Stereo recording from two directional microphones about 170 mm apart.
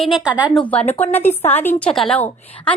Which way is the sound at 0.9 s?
10° left (ahead or behind).